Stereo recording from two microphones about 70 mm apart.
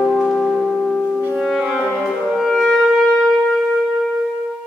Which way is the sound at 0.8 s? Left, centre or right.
Centre.